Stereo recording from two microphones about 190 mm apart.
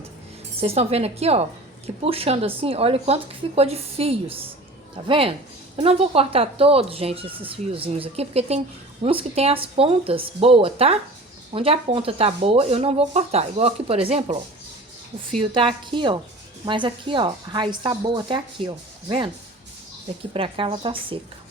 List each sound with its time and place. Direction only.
0.6 s speech: 30° right (ahead or behind)
15.4 s speech: 25° right (ahead or behind)
20.3 s speech: 30° right (ahead or behind)